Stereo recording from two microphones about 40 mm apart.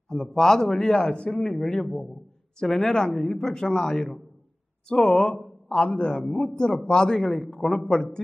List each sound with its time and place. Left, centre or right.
0.1 s a man's voice: centre
6.5 s a man's voice: centre